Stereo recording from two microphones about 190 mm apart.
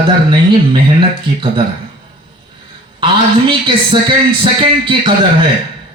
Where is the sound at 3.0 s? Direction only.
25° right (ahead or behind).